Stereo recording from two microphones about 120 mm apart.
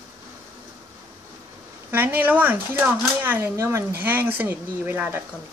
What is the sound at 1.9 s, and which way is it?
Speech, 15° right (ahead or behind).